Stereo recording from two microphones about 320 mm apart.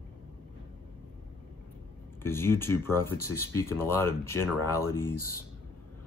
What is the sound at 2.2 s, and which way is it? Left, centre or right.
Speech, centre.